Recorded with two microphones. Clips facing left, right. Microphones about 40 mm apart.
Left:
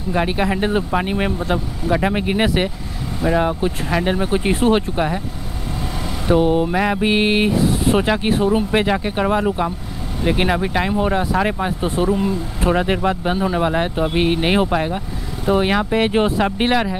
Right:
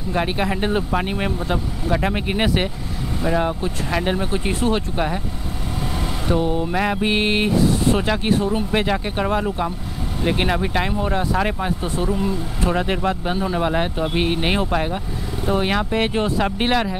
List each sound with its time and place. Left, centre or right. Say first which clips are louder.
0.1 s speech: left 3 dB; centre
4.3 s speech: left 5 dB; centre
4.9 s speech: left 2 dB; centre
6.2 s mantra: left 6 dB; left
6.7 s speech: left 2 dB; centre
11.8 s speech: left 7 dB; left
16.1 s speech: left 4 dB; left
16.3 s speech: left 2 dB; centre